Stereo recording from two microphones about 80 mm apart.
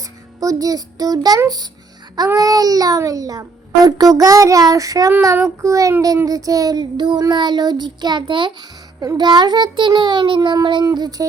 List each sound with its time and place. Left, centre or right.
0.3 s a child's voice: right
2.1 s child singing: right
9.1 s child singing: right
11.2 s child singing: right